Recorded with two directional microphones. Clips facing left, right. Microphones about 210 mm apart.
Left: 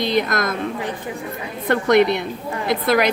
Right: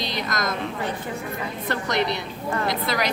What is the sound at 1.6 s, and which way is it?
A woman's voice, 55° left (ahead or behind).